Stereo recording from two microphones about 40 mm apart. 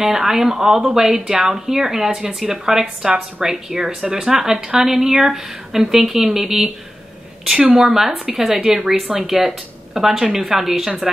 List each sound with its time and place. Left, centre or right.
0.0 s speech: centre
7.7 s speech: centre